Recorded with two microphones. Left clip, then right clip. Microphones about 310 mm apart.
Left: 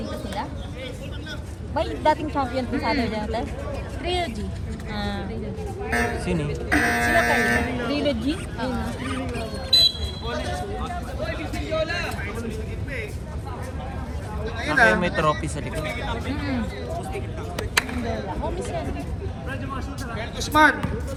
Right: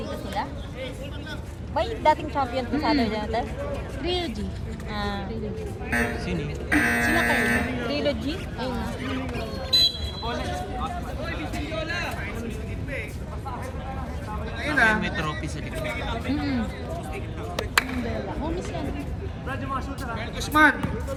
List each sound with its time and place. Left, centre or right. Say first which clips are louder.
1.7 s speech: even; right
4.1 s speech: left 3 dB; centre
4.9 s speech: even; right
5.9 s speech: left 2 dB; centre
7.9 s speech: left 2 dB; right
8.5 s speech: left 2 dB; centre
11.7 s a sound: left 5 dB; centre
14.6 s speech: left 3 dB; centre
16.3 s speech: right 1 dB; left
20.1 s speech: left 2 dB; centre